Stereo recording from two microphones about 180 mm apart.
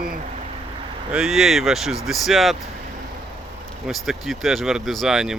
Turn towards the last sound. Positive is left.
turn(degrees=-5)  # may be behind; listen again after turning